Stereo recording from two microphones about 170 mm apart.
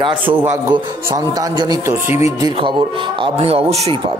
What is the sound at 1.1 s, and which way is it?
A man's voice, 20° right (ahead or behind).